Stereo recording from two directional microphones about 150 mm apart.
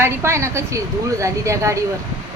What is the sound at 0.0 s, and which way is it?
A woman's voice, 15° right (ahead or behind).